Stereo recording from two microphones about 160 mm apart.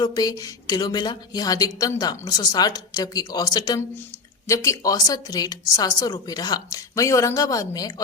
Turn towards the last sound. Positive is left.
turn(degrees=20)  # may be behind; listen again after turning